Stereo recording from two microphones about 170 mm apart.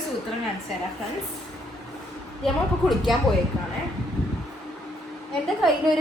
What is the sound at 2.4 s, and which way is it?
Speech, centre (ahead or behind).